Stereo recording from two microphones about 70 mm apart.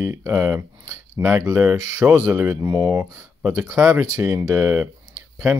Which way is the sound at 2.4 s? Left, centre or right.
Right.